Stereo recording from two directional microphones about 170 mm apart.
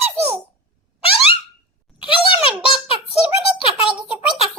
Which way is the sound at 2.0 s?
30° left (ahead or behind).